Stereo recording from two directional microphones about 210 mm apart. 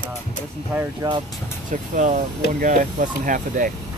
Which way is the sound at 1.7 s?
35° right (ahead or behind).